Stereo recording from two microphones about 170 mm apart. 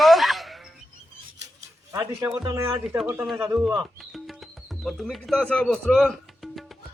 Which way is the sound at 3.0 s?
5° right (ahead or behind).